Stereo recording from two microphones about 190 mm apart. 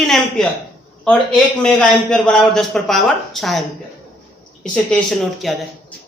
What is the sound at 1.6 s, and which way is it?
A man's voice, 5° left (ahead or behind).